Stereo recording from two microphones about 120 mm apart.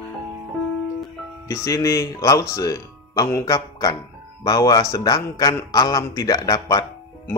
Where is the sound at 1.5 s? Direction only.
25° left (ahead or behind).